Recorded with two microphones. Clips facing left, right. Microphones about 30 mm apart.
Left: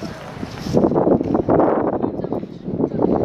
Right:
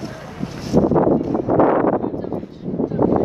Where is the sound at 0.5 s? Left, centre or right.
Centre.